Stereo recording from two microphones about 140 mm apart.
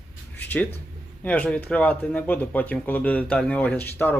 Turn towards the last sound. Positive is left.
turn(degrees=15)  # may be behind; listen again after turning